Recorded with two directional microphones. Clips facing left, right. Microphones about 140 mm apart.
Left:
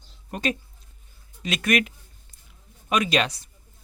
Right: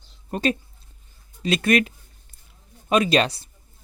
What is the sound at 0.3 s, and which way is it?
Speech, 30° right (ahead or behind).